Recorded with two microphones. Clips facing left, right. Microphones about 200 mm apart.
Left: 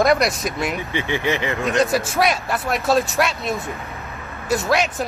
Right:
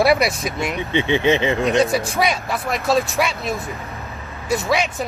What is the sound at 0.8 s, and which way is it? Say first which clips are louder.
Speech: right 5 dB; 20° right (ahead or behind).